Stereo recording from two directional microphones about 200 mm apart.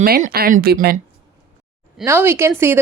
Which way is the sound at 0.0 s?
50° right (ahead or behind).